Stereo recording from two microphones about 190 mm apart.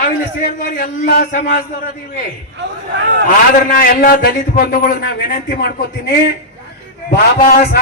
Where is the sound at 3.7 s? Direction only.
50° left (ahead or behind).